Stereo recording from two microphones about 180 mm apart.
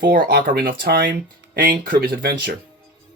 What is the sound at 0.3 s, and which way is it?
Speech, 65° right (ahead or behind).